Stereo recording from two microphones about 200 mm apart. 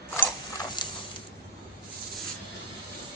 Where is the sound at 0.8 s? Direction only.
25° left (ahead or behind).